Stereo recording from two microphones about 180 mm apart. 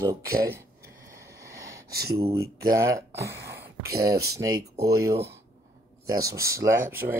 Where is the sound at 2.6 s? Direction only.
15° right (ahead or behind).